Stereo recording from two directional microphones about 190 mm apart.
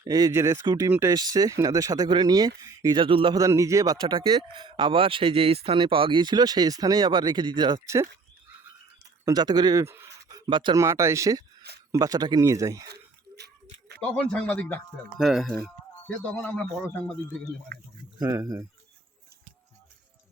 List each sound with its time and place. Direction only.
0.0 s speech: 20° right (ahead or behind)
3.3 s speech: 15° right (ahead or behind)
9.2 s speech: 20° right (ahead or behind)
12.9 s a sound: 60° right (ahead or behind)
14.3 s a man's voice: 5° left (ahead or behind)
17.7 s speech: 55° right (ahead or behind)
18.2 s speech: 15° right (ahead or behind)